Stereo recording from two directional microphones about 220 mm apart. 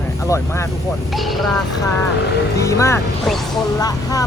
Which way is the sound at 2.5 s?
15° left (ahead or behind).